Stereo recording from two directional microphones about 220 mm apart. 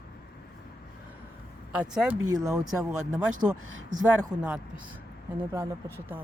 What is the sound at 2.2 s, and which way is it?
Speech, 15° right (ahead or behind).